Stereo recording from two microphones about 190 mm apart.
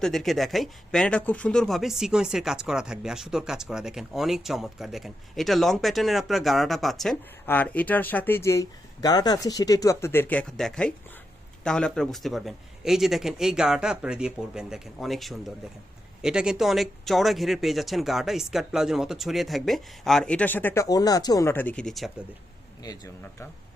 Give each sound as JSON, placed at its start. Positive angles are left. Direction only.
{"t": 0.0, "sound": "speech", "side_deg": 0}
{"t": 22.8, "sound": "speech", "side_deg": 20}